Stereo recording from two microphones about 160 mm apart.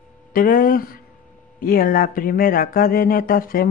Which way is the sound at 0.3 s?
60° left (ahead or behind).